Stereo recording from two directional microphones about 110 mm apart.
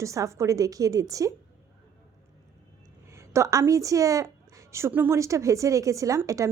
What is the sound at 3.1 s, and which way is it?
Speech, 25° right (ahead or behind).